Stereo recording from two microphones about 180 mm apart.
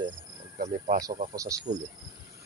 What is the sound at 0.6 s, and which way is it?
Speech, 40° right (ahead or behind).